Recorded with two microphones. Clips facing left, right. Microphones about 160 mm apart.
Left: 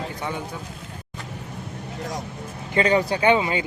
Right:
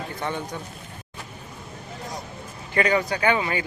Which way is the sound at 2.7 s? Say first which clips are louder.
Left 2 dB; 30° left (ahead or behind).